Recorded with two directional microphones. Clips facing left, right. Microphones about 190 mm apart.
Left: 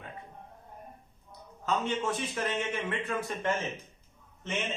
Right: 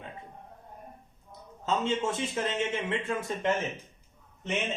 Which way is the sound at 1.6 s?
25° right (ahead or behind).